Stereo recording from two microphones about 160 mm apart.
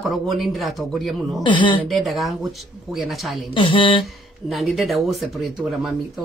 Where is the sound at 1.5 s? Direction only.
30° left (ahead or behind).